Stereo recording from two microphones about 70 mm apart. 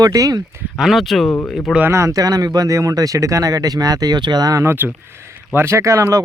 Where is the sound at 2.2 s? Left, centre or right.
Right.